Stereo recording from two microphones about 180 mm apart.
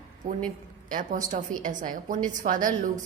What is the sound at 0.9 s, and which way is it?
A woman's voice, 45° right (ahead or behind).